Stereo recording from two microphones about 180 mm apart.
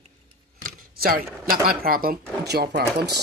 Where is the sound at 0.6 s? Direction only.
55° right (ahead or behind).